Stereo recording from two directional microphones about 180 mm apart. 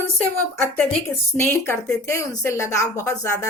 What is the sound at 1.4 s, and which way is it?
A woman's voice, 15° left (ahead or behind).